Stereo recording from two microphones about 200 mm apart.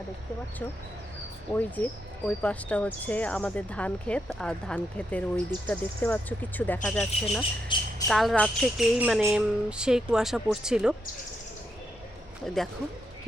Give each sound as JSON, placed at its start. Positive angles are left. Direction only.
{"t": 1.5, "sound": "speech", "side_deg": 10}
{"t": 7.7, "sound": "speech", "side_deg": 25}
{"t": 8.0, "sound": "speech", "side_deg": 0}
{"t": 12.5, "sound": "speech", "side_deg": 0}